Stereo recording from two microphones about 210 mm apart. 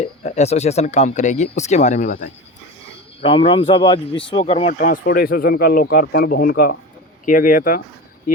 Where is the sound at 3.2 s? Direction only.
25° left (ahead or behind).